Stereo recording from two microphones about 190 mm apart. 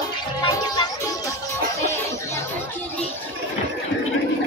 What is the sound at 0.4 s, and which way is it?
Music, 20° left (ahead or behind).